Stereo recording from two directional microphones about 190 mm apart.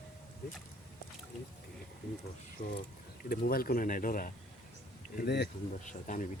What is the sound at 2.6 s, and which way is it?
Speech, 40° left (ahead or behind).